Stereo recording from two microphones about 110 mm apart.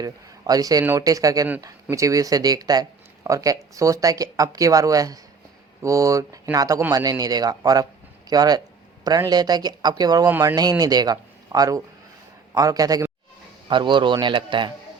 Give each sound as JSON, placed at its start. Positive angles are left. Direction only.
{"t": 0.0, "sound": "a man's voice", "side_deg": -35}
{"t": 13.7, "sound": "a man's voice", "side_deg": -45}